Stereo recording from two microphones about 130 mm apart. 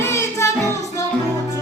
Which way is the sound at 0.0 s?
20° left (ahead or behind).